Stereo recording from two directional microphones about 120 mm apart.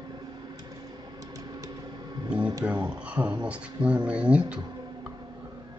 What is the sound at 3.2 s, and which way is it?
Speech, 30° right (ahead or behind).